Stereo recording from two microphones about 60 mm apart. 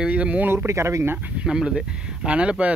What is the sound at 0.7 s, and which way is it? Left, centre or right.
Speech, right.